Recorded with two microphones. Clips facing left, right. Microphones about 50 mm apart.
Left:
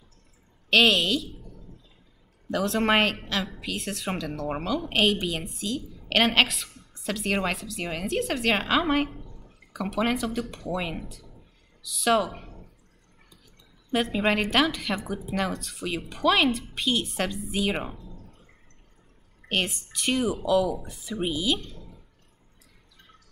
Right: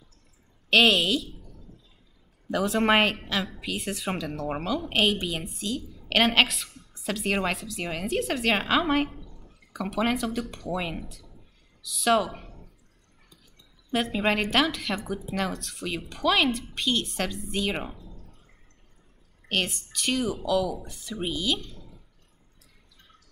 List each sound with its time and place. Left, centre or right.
0.7 s a woman's voice: centre
2.5 s a woman's voice: centre
13.9 s a woman's voice: centre
17.9 s a sound: left
19.5 s a woman's voice: centre